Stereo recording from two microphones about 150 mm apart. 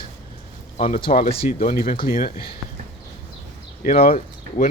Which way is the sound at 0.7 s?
55° left (ahead or behind).